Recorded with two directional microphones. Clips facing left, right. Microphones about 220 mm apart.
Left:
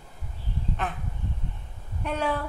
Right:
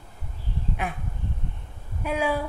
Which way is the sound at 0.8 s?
10° right (ahead or behind).